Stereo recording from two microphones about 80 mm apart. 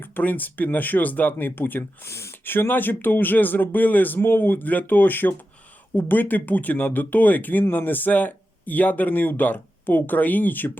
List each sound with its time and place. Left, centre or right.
0.2 s speech: left